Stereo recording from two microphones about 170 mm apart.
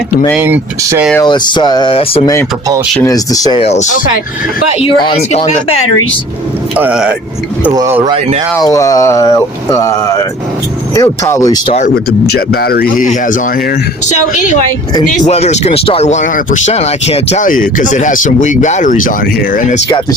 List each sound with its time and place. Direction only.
0.3 s speech: 15° right (ahead or behind)
1.2 s speech: 25° left (ahead or behind)
3.0 s speech: 20° left (ahead or behind)
3.6 s speech: 40° left (ahead or behind)
5.0 s speech: 35° left (ahead or behind)
6.7 s speech: 5° right (ahead or behind)
7.7 s speech: 20° right (ahead or behind)
8.5 s speech: 20° left (ahead or behind)
12.2 s speech: 70° left (ahead or behind); by 19.8 s 45° left (ahead or behind)